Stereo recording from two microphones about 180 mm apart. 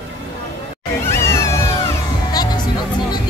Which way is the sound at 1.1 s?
15° left (ahead or behind).